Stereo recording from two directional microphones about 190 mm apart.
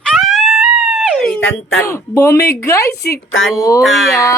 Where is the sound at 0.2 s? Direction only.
Centre (ahead or behind).